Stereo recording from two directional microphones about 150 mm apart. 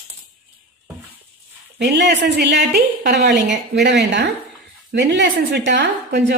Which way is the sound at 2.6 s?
90° right.